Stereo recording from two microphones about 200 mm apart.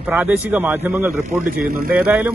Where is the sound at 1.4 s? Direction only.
45° right (ahead or behind).